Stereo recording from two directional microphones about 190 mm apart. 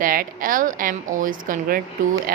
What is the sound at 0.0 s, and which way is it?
Speech, 50° right (ahead or behind).